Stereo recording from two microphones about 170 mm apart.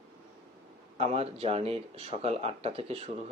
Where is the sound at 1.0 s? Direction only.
35° right (ahead or behind).